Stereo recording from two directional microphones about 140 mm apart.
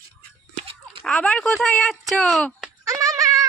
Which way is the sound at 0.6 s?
45° right (ahead or behind).